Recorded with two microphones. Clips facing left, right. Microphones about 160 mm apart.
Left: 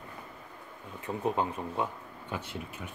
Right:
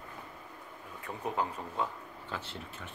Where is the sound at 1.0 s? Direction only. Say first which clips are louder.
Left 4 dB; 20° left (ahead or behind).